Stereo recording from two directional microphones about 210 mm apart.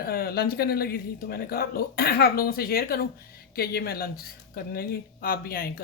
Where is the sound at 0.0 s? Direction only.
45° left (ahead or behind).